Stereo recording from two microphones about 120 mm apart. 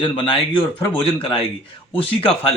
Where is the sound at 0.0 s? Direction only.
45° left (ahead or behind).